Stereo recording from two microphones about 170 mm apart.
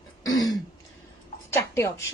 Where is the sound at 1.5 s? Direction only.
15° left (ahead or behind).